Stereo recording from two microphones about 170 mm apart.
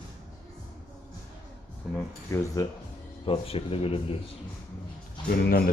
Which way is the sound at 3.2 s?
35° left (ahead or behind).